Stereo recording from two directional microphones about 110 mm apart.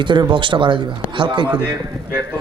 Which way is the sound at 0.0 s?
45° right (ahead or behind).